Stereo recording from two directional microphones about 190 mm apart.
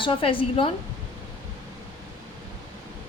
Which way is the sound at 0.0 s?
25° left (ahead or behind).